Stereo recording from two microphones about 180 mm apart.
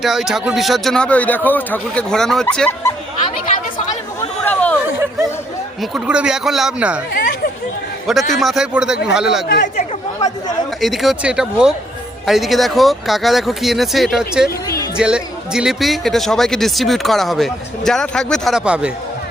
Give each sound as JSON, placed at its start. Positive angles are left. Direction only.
{"t": 0.0, "sound": "speech", "side_deg": 0}
{"t": 4.2, "sound": "a sound", "side_deg": 10}
{"t": 5.8, "sound": "speech", "side_deg": -5}
{"t": 7.1, "sound": "chatter", "side_deg": 55}
{"t": 8.0, "sound": "speech", "side_deg": 0}
{"t": 10.8, "sound": "speech", "side_deg": 0}